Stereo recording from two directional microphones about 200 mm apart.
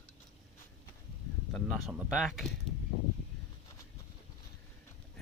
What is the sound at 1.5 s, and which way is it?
Speech, centre (ahead or behind).